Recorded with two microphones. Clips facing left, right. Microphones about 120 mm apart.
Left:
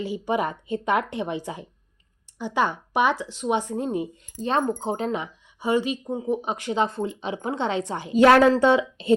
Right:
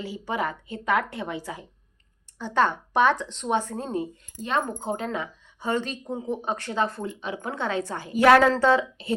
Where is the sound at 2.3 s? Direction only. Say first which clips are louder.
Right 1 dB; 10° left (ahead or behind).